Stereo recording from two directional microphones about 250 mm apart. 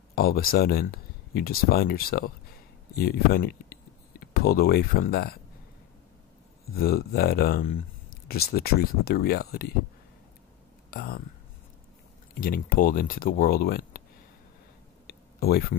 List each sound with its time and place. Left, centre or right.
0.1 s speech: left
6.7 s speech: left
10.9 s speech: left
12.4 s speech: left
15.0 s a sound: left